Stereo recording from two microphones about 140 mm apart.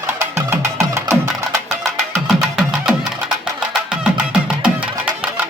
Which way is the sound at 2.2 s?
5° right (ahead or behind).